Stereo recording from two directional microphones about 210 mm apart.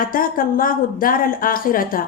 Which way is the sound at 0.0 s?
40° left (ahead or behind).